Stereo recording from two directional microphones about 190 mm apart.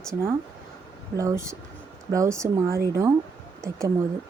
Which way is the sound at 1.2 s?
15° right (ahead or behind).